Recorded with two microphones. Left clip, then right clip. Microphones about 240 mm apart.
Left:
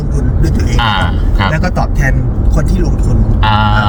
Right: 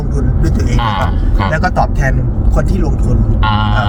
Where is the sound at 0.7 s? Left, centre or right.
Centre.